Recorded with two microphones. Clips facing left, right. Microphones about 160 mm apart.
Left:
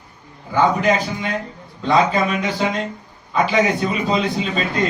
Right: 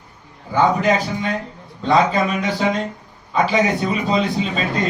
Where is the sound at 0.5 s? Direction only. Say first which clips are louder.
Even; centre (ahead or behind).